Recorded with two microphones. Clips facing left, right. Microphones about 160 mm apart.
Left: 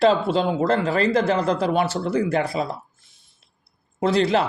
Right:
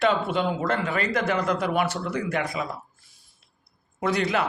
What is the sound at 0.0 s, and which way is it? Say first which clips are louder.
Speech: left 5 dB; 30° left (ahead or behind).